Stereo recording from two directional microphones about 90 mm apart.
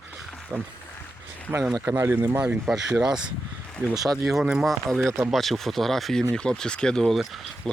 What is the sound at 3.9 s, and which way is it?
Speech, 45° right (ahead or behind).